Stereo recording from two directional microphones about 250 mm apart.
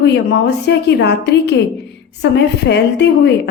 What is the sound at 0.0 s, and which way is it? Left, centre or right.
A woman's voice, left.